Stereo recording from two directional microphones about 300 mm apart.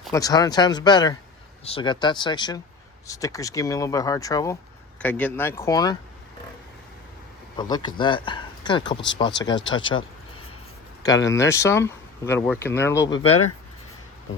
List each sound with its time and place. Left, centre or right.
0.1 s speech: centre
7.5 s speech: centre
11.0 s speech: centre
13.2 s speech: left